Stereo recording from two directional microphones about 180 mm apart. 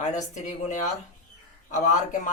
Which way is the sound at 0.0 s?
40° left (ahead or behind).